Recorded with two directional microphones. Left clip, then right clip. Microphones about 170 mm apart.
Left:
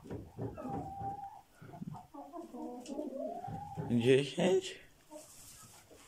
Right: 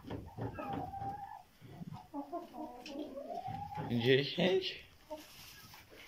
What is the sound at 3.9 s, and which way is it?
Speech, 10° left (ahead or behind).